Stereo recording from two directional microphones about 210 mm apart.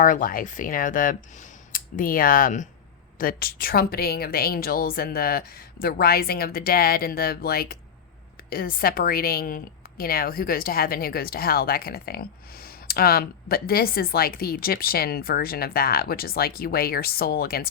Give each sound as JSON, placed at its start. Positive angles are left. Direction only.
{"t": 0.0, "sound": "a woman's voice", "side_deg": 40}